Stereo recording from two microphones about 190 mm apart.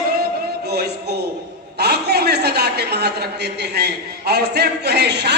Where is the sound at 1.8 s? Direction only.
60° right (ahead or behind).